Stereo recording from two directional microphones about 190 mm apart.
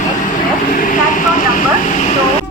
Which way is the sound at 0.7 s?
45° left (ahead or behind).